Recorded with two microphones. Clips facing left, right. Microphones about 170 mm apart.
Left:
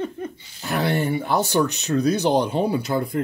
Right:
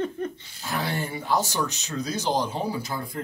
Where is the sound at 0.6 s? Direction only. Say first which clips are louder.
Left 7 dB; 65° left (ahead or behind).